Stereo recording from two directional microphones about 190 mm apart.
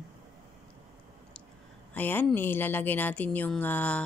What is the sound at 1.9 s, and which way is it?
Speech, 10° left (ahead or behind).